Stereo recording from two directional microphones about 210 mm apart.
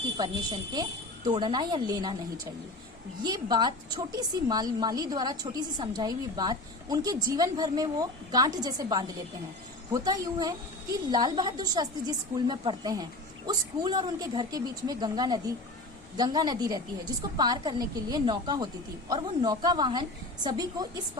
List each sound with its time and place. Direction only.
0.2 s a woman's voice: 20° right (ahead or behind)
3.2 s a woman's voice: 20° right (ahead or behind)